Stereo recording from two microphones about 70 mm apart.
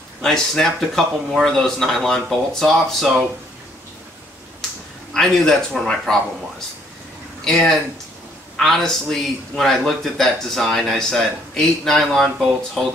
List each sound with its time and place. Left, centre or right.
0.2 s speech: centre
5.1 s speech: centre
7.4 s speech: centre